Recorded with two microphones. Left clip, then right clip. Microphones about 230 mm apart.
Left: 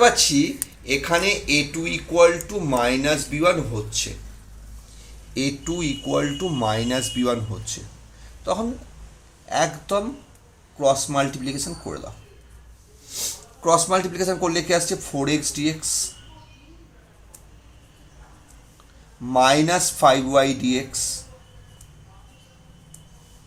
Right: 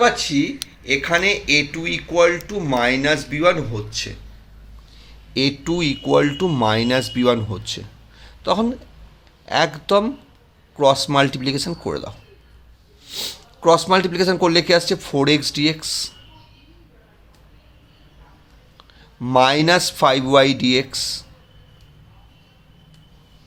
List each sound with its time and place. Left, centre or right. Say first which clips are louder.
0.0 s speech: left 1 dB; centre
5.3 s speech: right 6 dB; right
13.1 s speech: right 3 dB; right
19.2 s speech: right 2 dB; right